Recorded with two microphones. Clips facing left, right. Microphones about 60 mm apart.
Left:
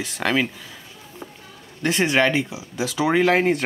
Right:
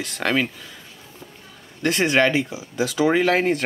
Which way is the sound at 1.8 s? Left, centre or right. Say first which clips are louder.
Right 1 dB; centre.